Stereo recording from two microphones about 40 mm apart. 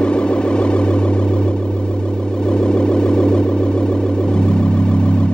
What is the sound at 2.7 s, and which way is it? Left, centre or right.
Music, left.